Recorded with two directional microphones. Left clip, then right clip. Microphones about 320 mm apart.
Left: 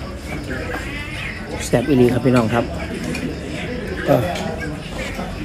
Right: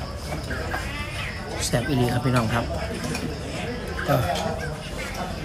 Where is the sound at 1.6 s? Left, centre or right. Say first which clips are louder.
Left 9 dB; centre.